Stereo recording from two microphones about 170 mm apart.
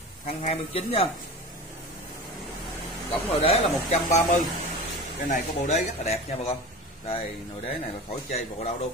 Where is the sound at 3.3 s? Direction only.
35° left (ahead or behind).